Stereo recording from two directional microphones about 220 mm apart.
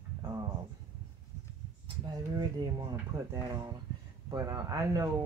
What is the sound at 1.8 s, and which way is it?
Speech, 20° right (ahead or behind).